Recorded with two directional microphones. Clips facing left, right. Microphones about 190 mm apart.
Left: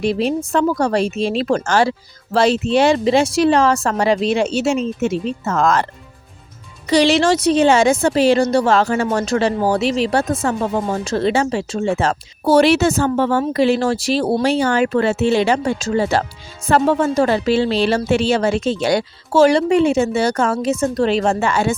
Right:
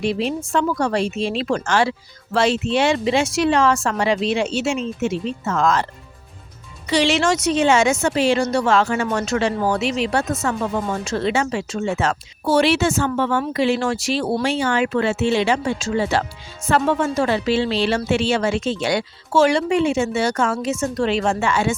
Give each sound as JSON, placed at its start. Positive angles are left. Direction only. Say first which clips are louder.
{"t": 0.0, "sound": "a woman's voice", "louder": "left 4 dB", "side_deg": 40}
{"t": 6.8, "sound": "a woman's voice", "louder": "left 4 dB", "side_deg": 40}